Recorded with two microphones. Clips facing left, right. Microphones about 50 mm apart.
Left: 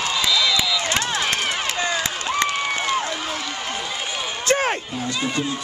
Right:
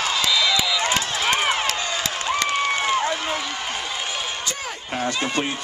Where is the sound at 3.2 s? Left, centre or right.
Centre.